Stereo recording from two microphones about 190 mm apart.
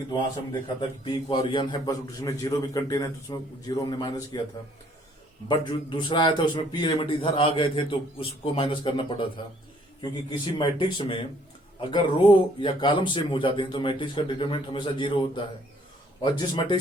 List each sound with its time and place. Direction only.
0.8 s a man's voice: 25° left (ahead or behind)
5.5 s a man's voice: 25° left (ahead or behind)